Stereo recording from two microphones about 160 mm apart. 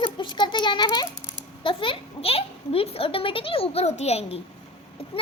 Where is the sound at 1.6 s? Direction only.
35° left (ahead or behind).